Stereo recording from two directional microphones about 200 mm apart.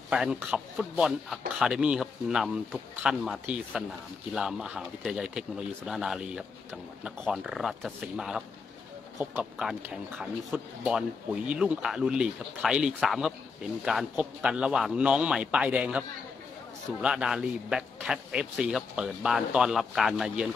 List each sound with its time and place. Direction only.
0.1 s speech: 5° right (ahead or behind)
17.0 s speech: 5° right (ahead or behind)